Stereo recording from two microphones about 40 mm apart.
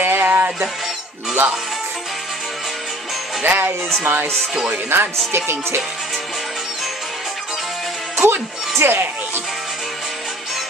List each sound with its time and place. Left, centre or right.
0.0 s music: right
3.4 s music: right
4.9 s speech: right
8.2 s music: right